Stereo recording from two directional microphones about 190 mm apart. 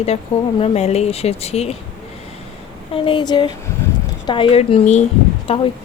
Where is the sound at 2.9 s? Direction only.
25° left (ahead or behind).